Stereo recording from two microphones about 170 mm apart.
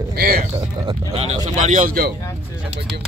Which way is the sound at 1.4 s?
45° right (ahead or behind).